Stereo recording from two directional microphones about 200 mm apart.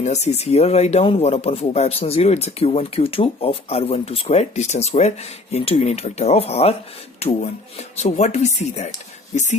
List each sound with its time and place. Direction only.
0.0 s speech: 35° left (ahead or behind)